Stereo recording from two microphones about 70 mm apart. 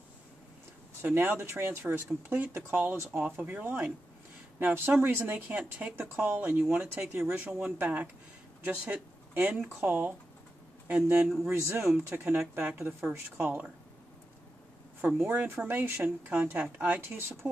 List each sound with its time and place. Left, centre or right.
1.0 s speech: right
11.4 s speech: right
15.0 s speech: right
17.1 s speech: right